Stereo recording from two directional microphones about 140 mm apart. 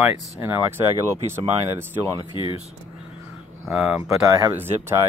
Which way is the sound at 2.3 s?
35° left (ahead or behind).